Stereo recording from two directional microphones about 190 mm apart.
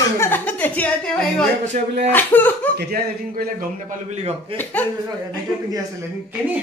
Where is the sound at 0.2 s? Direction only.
10° left (ahead or behind).